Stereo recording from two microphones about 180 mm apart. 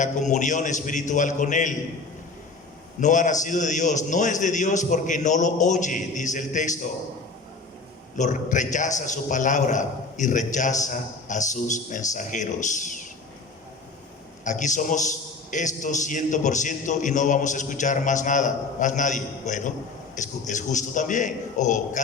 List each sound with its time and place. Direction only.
0.0 s a man's voice: 40° left (ahead or behind)
3.0 s a man's voice: 45° left (ahead or behind)
8.1 s a man's voice: 45° left (ahead or behind)
14.4 s a man's voice: 45° left (ahead or behind)